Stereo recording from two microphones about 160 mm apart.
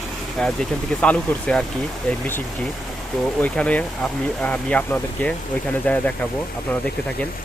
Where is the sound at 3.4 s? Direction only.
10° left (ahead or behind).